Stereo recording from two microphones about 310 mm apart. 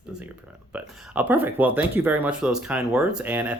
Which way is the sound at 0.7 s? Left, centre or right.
Centre.